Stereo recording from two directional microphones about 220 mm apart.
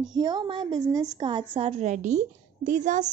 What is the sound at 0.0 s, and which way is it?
A woman's voice, 20° right (ahead or behind).